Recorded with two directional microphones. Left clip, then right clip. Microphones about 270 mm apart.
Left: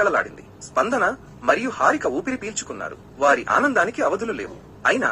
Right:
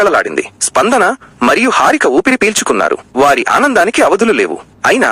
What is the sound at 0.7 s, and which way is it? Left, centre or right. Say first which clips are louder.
Speech: right 10 dB; right.